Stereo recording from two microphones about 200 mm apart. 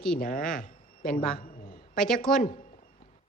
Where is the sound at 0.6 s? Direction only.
45° left (ahead or behind).